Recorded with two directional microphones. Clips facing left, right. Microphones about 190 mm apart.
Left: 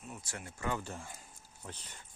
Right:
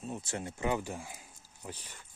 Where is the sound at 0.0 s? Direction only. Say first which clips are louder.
Right 8 dB; 25° right (ahead or behind).